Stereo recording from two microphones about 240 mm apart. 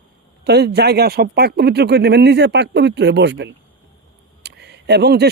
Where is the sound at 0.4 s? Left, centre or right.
Right.